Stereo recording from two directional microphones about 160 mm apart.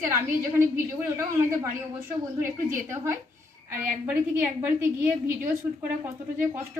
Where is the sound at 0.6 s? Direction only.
15° right (ahead or behind).